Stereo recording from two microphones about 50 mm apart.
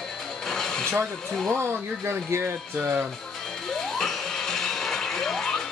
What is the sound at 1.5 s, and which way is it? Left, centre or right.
Speech, right.